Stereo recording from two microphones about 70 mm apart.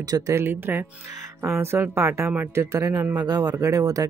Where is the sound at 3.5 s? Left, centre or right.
Right.